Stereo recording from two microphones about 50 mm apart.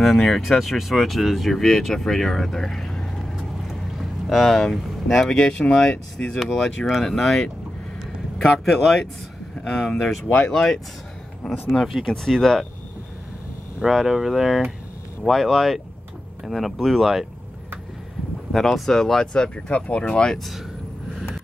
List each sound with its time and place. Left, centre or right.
0.0 s speech: centre
3.6 s boat: centre
5.4 s speech: centre
13.7 s speech: centre
18.5 s speech: centre
19.3 s speech: centre